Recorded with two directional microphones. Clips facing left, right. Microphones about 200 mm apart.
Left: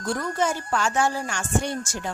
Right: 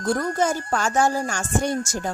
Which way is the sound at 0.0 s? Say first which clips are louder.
Right 3 dB; 40° right (ahead or behind).